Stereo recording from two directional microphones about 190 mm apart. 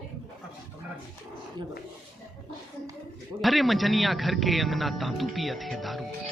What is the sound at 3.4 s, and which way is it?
A man's voice, centre (ahead or behind).